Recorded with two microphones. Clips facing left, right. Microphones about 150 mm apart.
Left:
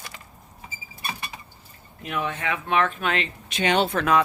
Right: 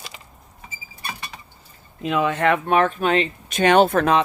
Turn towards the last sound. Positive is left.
turn(degrees=-50)  # may be behind; listen again after turning